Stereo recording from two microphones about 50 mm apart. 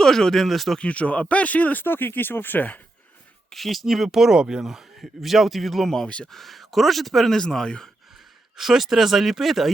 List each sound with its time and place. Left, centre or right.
0.0 s a man's voice: centre
0.8 s speech: left
1.8 s speech: left
3.5 s a man's voice: centre
7.3 s speech: centre
8.5 s a man's voice: centre